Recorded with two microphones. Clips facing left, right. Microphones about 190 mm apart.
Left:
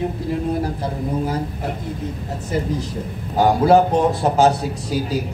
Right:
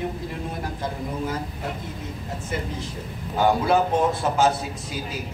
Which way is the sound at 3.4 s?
35° left (ahead or behind).